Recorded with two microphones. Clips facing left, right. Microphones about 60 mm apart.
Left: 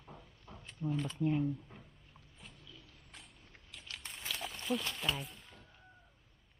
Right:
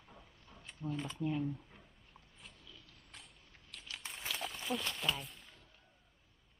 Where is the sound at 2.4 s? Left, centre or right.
Centre.